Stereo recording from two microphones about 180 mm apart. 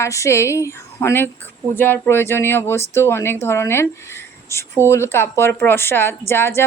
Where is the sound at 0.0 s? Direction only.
15° left (ahead or behind).